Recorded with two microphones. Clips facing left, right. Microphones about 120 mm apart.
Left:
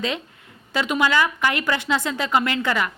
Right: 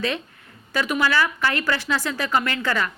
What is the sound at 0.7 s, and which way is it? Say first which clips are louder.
A woman's voice: left 1 dB; 20° left (ahead or behind).